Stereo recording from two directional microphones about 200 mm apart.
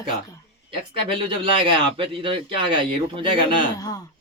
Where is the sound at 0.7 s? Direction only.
25° right (ahead or behind).